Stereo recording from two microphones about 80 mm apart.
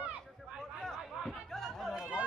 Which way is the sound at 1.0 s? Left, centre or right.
Centre.